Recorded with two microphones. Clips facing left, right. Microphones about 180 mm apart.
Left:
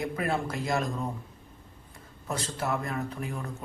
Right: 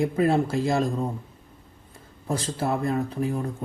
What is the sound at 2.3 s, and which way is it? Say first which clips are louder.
Speech: right 5 dB; 30° right (ahead or behind).